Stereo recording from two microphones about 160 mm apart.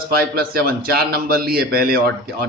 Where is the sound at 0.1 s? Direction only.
70° right (ahead or behind).